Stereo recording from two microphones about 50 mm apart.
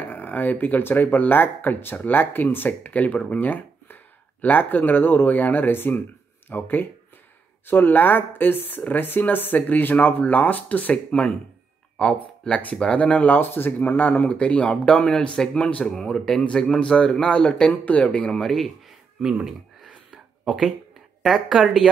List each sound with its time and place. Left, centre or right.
0.0 s speech: left
2.9 s speech: left
11.1 s speech: centre
12.2 s speech: left
13.4 s speech: left; by 18.4 s centre
18.4 s speech: centre
19.2 s a sound: centre
21.3 s speech: centre